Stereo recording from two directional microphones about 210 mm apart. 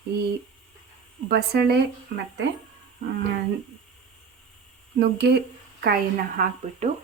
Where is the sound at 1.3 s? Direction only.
50° right (ahead or behind).